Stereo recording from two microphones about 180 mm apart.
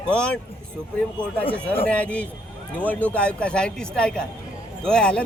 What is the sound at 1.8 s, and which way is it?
A man's voice, 5° left (ahead or behind).